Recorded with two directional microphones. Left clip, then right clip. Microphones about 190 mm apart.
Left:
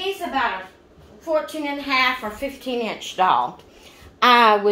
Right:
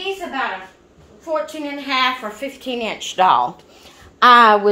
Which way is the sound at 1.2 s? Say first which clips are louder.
Even; 15° right (ahead or behind).